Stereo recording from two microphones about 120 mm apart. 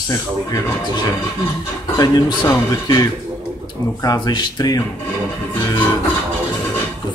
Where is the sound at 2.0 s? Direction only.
25° left (ahead or behind).